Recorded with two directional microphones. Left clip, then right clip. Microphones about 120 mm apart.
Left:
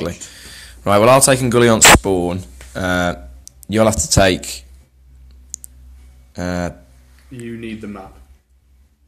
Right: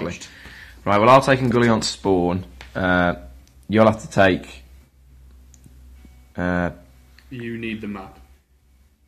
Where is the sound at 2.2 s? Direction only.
Centre (ahead or behind).